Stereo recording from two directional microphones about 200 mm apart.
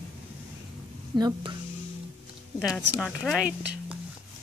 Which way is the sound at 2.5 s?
Centre (ahead or behind).